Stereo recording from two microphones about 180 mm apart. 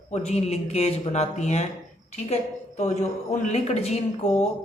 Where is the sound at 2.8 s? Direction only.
40° left (ahead or behind).